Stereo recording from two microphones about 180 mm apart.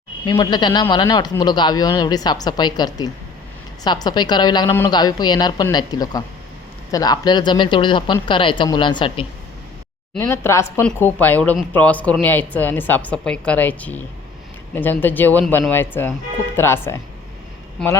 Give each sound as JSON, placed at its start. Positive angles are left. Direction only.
{"t": 0.3, "sound": "a man's voice", "side_deg": 25}
{"t": 10.2, "sound": "speech", "side_deg": 15}